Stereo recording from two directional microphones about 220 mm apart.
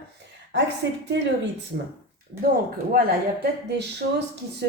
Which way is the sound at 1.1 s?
50° right (ahead or behind).